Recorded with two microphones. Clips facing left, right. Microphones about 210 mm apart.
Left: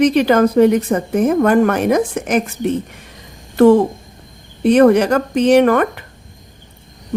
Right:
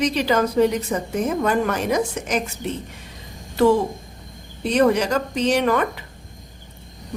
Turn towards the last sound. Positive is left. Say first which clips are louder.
# left 8 dB
turn(degrees=55)  # may be behind; listen again after turning